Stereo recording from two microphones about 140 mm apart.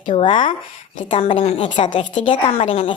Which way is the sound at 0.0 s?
35° left (ahead or behind).